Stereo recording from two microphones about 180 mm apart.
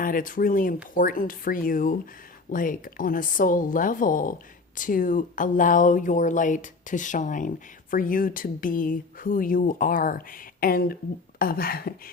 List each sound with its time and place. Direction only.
0.0 s speech: 50° left (ahead or behind)